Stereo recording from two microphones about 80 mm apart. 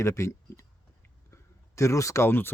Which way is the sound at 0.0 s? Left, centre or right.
Left.